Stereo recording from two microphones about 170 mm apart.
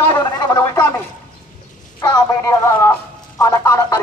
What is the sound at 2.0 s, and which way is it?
Speech, 15° left (ahead or behind).